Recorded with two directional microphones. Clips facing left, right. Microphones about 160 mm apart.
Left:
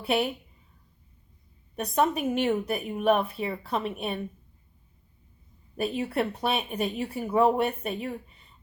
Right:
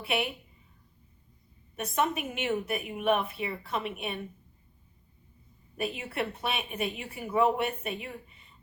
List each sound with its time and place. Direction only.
1.7 s a woman's voice: 35° left (ahead or behind)
5.7 s a woman's voice: 35° left (ahead or behind)